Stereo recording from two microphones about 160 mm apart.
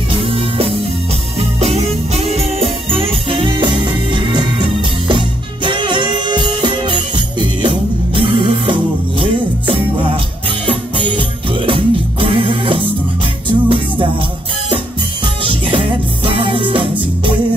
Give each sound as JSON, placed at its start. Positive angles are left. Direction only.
{"t": 0.1, "sound": "music", "side_deg": -35}
{"t": 15.4, "sound": "music", "side_deg": -35}